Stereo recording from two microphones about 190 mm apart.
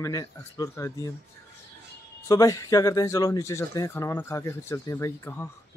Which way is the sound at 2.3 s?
15° left (ahead or behind).